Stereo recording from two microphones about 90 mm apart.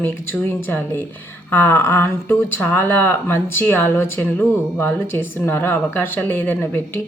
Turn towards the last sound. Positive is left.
turn(degrees=20)  # may be behind; listen again after turning